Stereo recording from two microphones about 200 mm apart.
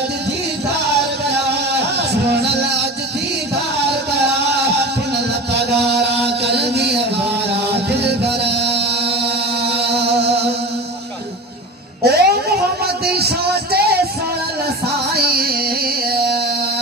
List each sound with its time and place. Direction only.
2.4 s music: 55° right (ahead or behind)
5.9 s music: 55° right (ahead or behind)
8.0 s music: 55° right (ahead or behind)
12.0 s music: 50° right (ahead or behind)
15.1 s music: 50° right (ahead or behind)